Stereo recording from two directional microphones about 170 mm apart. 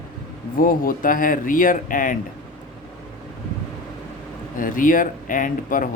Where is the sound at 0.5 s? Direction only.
55° left (ahead or behind).